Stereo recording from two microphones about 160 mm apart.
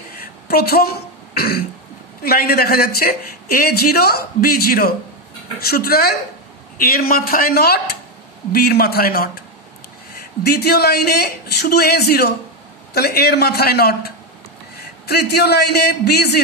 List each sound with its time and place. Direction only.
0.1 s throat clearing: 70° left (ahead or behind)
2.2 s a man's voice: 70° left (ahead or behind)
10.4 s a man's voice: 80° left
14.8 s a man's voice: 90° left